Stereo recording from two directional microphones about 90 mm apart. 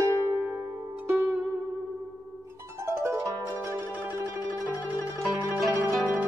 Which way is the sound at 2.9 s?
30° right (ahead or behind).